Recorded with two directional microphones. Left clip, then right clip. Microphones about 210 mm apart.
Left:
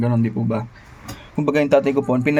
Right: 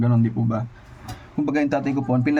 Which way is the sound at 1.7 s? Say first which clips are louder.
Left 7 dB; 10° left (ahead or behind).